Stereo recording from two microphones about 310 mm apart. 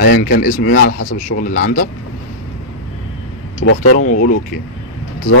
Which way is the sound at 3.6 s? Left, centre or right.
Left.